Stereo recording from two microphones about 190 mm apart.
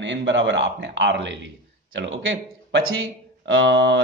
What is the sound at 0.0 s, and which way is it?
Speech, 75° right (ahead or behind).